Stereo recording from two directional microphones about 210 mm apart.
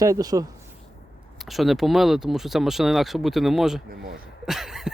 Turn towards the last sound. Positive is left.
turn(degrees=0)  # may be behind; listen again after turning